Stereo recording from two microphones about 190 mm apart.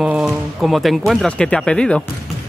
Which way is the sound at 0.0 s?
5° right (ahead or behind).